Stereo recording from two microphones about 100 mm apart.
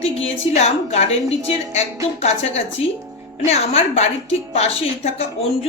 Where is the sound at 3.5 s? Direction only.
85° left.